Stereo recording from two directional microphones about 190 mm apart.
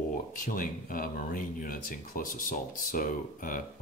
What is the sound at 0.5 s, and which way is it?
Speech, 45° left (ahead or behind).